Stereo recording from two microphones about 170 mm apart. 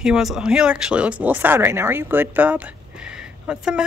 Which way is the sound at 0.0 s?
5° right (ahead or behind).